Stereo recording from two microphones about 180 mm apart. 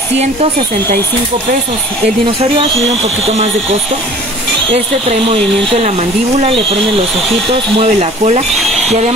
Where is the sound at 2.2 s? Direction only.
35° right (ahead or behind).